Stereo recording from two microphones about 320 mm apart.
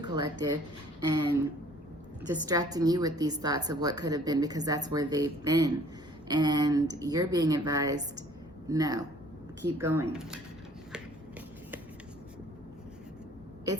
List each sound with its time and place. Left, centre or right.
0.0 s a woman's voice: centre
2.5 s a woman's voice: centre
10.9 s finger snapping: centre